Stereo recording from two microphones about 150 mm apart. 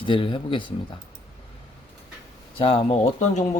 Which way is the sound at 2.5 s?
35° left (ahead or behind).